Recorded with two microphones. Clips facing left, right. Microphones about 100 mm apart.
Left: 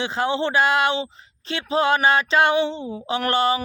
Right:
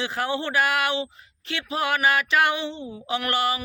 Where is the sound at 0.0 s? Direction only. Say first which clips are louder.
Left 4 dB; 25° left (ahead or behind).